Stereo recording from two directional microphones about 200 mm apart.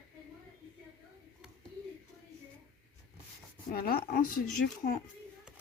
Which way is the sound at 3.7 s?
50° left (ahead or behind).